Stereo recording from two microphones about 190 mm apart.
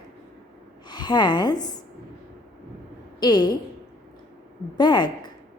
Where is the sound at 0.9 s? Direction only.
25° left (ahead or behind).